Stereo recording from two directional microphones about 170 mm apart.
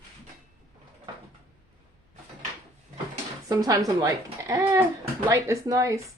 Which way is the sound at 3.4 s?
20° right (ahead or behind).